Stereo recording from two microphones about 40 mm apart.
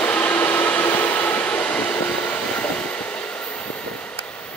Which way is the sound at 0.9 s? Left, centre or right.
Left.